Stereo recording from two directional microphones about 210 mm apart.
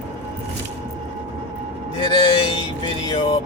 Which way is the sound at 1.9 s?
20° left (ahead or behind).